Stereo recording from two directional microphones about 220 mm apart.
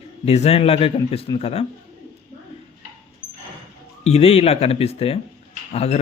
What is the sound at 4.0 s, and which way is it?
Speech, 30° left (ahead or behind).